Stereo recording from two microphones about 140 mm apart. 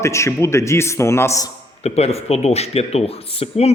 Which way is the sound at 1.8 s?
45° left (ahead or behind).